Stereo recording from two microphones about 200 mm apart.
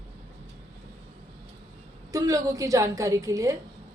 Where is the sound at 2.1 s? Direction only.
15° right (ahead or behind).